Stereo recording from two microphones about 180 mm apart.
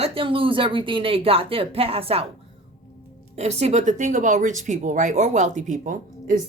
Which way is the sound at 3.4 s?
35° right (ahead or behind).